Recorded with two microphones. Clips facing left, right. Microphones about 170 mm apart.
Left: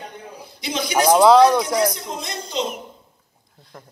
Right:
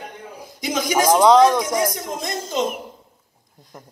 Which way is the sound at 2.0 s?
45° right (ahead or behind).